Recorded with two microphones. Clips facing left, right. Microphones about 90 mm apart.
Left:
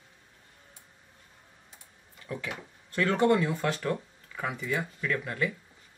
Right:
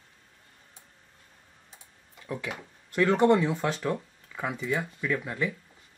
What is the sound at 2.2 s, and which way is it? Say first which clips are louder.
Speech: right 2 dB; 10° right (ahead or behind).